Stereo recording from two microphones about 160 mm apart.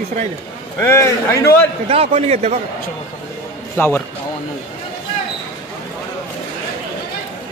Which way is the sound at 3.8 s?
10° left (ahead or behind).